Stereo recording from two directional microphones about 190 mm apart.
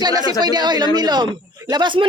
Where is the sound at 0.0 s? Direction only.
20° right (ahead or behind).